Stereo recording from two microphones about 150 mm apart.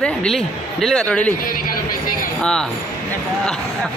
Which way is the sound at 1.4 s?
70° left (ahead or behind).